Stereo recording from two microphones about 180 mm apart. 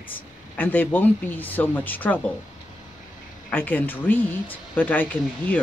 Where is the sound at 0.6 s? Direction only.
10° left (ahead or behind).